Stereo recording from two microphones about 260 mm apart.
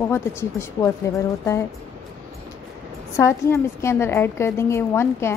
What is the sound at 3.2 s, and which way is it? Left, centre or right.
A woman's voice, centre.